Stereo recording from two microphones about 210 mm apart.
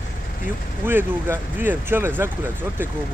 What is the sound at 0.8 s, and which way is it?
Speech, 10° right (ahead or behind).